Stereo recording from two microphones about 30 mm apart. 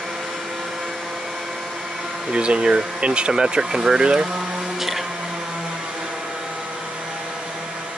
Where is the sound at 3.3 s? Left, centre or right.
Right.